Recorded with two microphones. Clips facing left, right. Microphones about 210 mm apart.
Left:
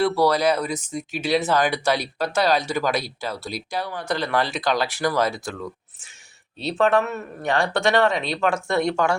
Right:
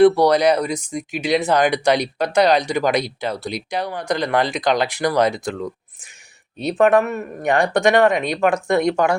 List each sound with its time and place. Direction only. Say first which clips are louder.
0.0 s speech: right 6 dB; 15° right (ahead or behind)